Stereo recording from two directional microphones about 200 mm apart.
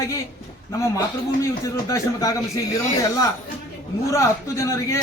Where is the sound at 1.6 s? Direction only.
15° left (ahead or behind).